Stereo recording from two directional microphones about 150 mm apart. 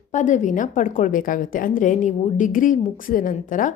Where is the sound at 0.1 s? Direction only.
55° left (ahead or behind).